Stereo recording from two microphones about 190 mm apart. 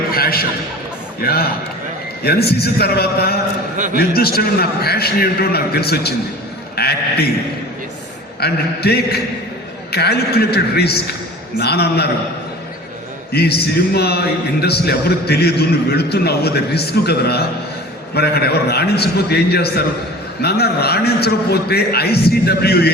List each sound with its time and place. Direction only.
0.1 s a sound: 50° left (ahead or behind)
1.2 s a man's voice: 55° left (ahead or behind)
6.7 s sheep: 55° left (ahead or behind)
8.4 s a man's voice: 55° left (ahead or behind)
13.3 s a man's voice: 55° left (ahead or behind)